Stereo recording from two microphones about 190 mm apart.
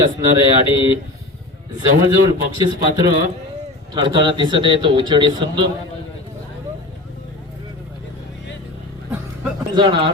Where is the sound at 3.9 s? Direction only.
25° right (ahead or behind).